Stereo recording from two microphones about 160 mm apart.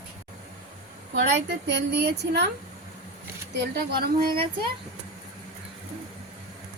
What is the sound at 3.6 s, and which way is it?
Speech, 75° right (ahead or behind).